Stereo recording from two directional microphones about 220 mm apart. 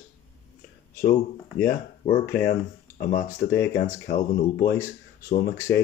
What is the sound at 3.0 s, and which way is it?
Speech, 40° left (ahead or behind).